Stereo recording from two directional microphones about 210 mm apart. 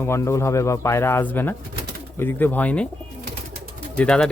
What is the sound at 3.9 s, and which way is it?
Speech, 5° left (ahead or behind).